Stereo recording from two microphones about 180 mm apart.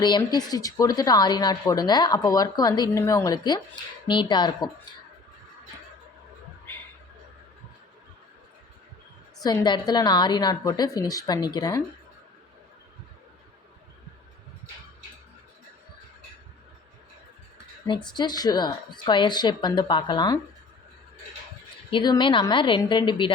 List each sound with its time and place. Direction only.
0.0 s a woman's voice: 25° left (ahead or behind)
9.4 s a woman's voice: 25° left (ahead or behind)
17.8 s a woman's voice: 25° left (ahead or behind)
21.8 s a woman's voice: 25° left (ahead or behind)